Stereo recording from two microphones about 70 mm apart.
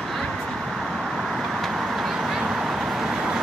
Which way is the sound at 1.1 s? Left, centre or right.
Centre.